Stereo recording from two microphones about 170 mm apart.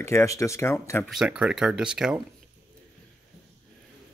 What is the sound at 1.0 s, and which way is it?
Speech, 5° right (ahead or behind).